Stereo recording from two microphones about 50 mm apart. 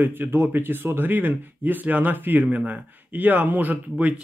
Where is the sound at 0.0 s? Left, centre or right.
Right.